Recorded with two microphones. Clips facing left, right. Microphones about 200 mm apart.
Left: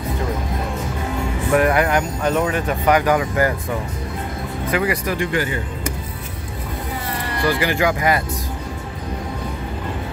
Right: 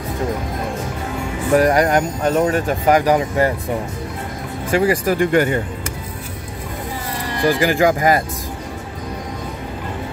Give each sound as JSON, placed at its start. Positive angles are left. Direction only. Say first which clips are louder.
{"t": 1.5, "sound": "speech", "louder": "right 3 dB", "side_deg": -40}
{"t": 5.0, "sound": "speech", "louder": "right 6 dB", "side_deg": -45}
{"t": 7.4, "sound": "speech", "louder": "right 4 dB", "side_deg": -45}